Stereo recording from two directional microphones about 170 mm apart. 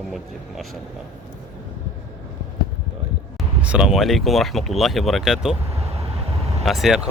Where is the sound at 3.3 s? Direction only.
5° right (ahead or behind).